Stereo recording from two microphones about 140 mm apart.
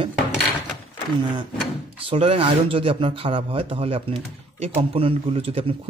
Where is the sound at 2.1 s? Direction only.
45° right (ahead or behind).